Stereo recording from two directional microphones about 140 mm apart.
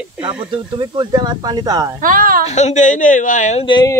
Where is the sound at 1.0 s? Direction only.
30° right (ahead or behind).